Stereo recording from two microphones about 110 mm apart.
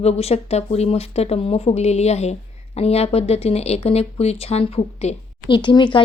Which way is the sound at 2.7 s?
70° left (ahead or behind).